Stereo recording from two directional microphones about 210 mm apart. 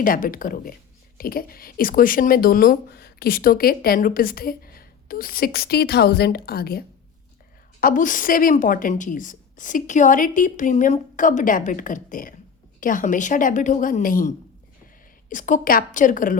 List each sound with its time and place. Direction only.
0.0 s a woman's voice: 40° left (ahead or behind)